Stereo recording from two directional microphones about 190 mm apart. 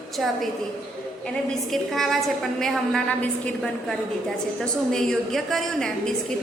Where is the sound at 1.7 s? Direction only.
Centre (ahead or behind).